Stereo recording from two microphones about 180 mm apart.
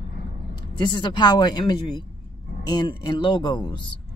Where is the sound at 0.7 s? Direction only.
25° left (ahead or behind).